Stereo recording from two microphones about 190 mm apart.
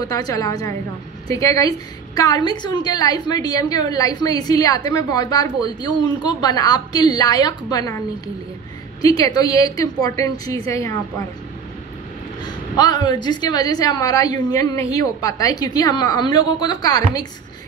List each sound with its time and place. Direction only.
0.0 s a woman's voice: 20° left (ahead or behind)
9.0 s a woman's voice: 20° left (ahead or behind)
12.4 s a woman's voice: 20° left (ahead or behind)